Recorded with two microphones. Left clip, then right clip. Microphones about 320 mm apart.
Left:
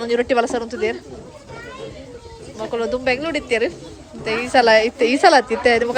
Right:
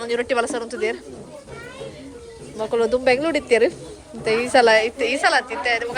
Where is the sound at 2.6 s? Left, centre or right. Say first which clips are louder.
Right 3 dB; centre.